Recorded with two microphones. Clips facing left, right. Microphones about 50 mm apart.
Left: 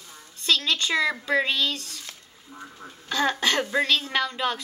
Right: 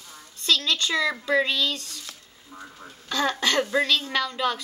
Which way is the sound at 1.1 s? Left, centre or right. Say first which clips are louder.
Right 1 dB; centre.